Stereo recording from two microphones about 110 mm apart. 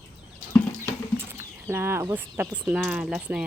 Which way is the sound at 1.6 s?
20° right (ahead or behind).